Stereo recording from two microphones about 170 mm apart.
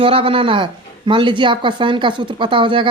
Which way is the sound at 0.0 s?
35° right (ahead or behind).